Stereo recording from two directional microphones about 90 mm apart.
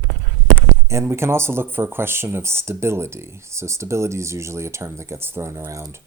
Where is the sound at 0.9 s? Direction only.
30° right (ahead or behind).